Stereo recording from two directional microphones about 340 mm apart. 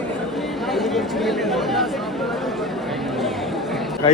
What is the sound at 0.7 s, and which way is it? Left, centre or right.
Speech, centre.